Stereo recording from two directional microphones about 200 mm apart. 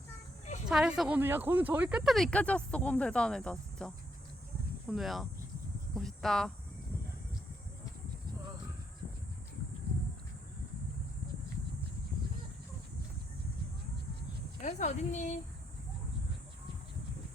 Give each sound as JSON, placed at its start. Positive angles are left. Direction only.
{"t": 0.7, "sound": "speech", "side_deg": -5}
{"t": 14.6, "sound": "speech", "side_deg": 35}